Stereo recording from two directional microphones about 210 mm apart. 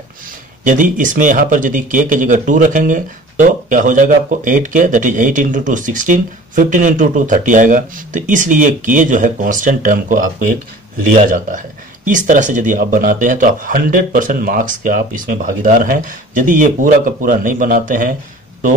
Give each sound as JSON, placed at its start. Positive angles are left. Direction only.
{"t": 0.7, "sound": "speech", "side_deg": -40}